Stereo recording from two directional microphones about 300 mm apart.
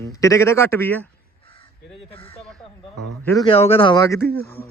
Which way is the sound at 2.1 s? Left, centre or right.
Centre.